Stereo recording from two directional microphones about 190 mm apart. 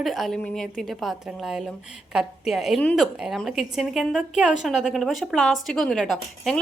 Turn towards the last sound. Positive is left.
turn(degrees=0)  # may be behind; listen again after turning